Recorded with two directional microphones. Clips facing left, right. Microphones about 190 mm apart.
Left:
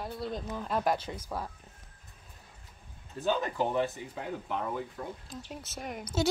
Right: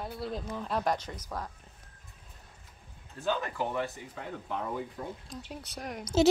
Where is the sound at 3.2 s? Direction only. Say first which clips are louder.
Left 2 dB; 20° left (ahead or behind).